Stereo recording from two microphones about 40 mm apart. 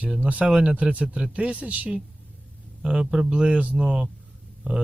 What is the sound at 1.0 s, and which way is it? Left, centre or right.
Speech, right.